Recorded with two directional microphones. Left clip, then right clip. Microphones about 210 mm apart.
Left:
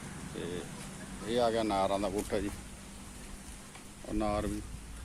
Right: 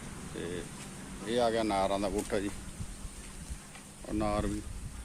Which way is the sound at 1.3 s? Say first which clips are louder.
Right 1 dB; 10° right (ahead or behind).